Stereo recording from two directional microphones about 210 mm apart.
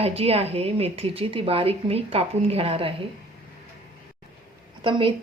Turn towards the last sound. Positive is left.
turn(degrees=-25)  # may be behind; listen again after turning